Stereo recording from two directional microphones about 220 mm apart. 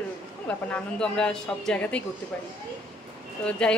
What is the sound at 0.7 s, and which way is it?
A woman's voice, 5° left (ahead or behind).